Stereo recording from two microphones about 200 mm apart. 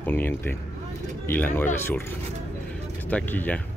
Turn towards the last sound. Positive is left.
turn(degrees=10)  # may be behind; listen again after turning